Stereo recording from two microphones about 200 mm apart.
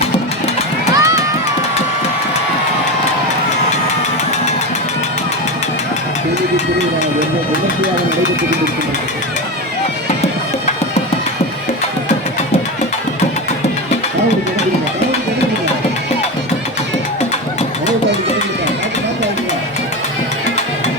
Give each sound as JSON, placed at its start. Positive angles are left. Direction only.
{"t": 0.9, "sound": "run", "side_deg": -15}